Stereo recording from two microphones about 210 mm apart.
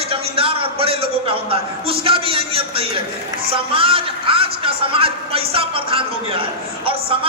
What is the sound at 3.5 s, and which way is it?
Speech, 25° right (ahead or behind).